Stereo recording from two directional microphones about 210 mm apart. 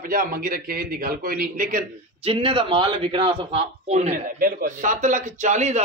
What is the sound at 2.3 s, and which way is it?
A man's voice, 25° right (ahead or behind).